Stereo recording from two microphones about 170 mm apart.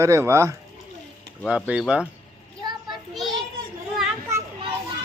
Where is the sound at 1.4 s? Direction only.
5° right (ahead or behind).